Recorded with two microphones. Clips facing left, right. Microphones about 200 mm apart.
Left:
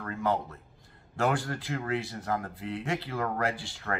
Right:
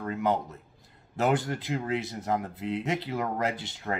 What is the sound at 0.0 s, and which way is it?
A man's voice, 20° right (ahead or behind).